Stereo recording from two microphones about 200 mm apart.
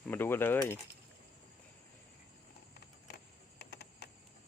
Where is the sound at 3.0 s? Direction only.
60° left (ahead or behind).